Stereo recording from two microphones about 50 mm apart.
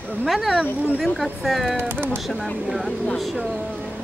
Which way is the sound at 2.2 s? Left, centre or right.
Centre.